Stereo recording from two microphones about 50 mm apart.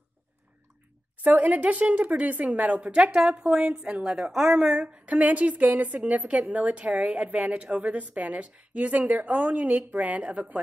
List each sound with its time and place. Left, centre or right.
1.2 s a woman's voice: right; by 4.6 s centre
4.6 s a woman's voice: right